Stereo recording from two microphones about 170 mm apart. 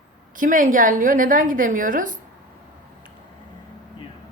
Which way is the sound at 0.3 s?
50° right (ahead or behind).